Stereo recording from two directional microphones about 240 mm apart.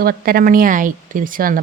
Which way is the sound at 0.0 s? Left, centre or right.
Right.